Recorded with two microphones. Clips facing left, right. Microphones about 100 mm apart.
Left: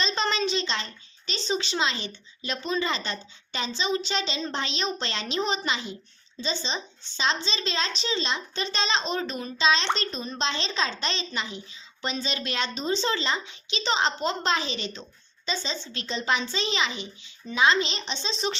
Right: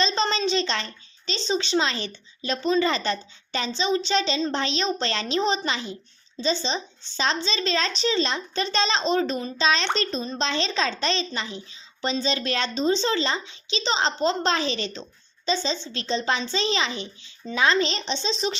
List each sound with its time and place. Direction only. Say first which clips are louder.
0.0 s a woman's voice: right 3 dB; 30° right (ahead or behind)